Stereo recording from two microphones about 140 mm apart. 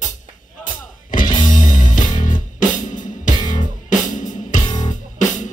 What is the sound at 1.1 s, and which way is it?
Music, 70° left (ahead or behind).